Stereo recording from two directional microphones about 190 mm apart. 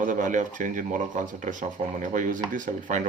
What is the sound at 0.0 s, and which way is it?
Speech, 45° right (ahead or behind).